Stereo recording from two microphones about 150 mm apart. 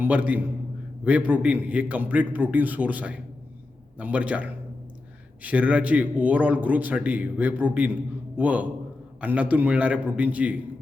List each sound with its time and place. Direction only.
0.0 s a man's voice: 10° right (ahead or behind)